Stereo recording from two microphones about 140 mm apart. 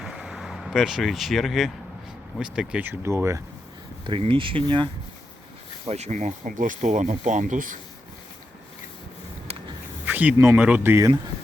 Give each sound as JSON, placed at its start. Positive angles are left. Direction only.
{"t": 0.0, "sound": "vehicle", "side_deg": -5}
{"t": 2.4, "sound": "speech", "side_deg": -5}
{"t": 4.0, "sound": "speech", "side_deg": -40}
{"t": 5.9, "sound": "speech", "side_deg": -55}
{"t": 10.1, "sound": "a sound", "side_deg": -10}
{"t": 10.3, "sound": "speech", "side_deg": -20}